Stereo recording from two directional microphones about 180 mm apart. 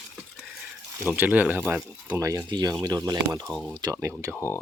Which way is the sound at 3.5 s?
5° right (ahead or behind).